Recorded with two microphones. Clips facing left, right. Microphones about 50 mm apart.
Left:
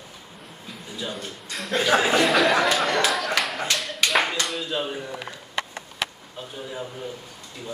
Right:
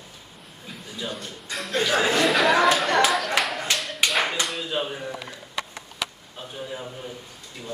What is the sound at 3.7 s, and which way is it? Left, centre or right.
Clapping, centre.